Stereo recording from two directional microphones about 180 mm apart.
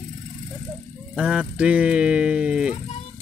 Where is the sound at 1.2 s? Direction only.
5° right (ahead or behind).